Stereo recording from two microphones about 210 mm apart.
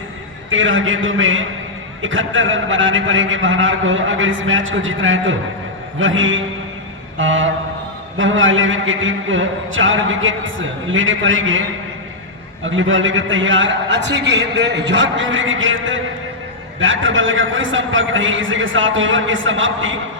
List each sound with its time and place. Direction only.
0.5 s a man's voice: 65° right (ahead or behind)
12.6 s a man's voice: 65° right (ahead or behind)